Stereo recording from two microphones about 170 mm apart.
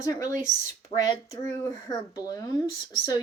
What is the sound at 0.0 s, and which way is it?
Speech, 20° left (ahead or behind).